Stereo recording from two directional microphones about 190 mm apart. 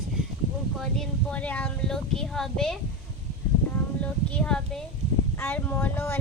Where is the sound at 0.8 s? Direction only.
Centre (ahead or behind).